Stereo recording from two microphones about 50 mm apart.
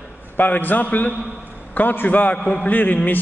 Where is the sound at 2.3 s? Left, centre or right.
Left.